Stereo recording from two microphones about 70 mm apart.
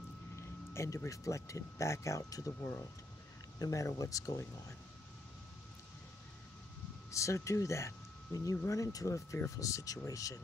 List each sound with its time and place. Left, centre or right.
0.4 s speech: left
3.5 s speech: left
7.1 s speech: left